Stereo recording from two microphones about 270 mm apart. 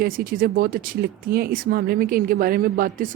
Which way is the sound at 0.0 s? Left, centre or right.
Right.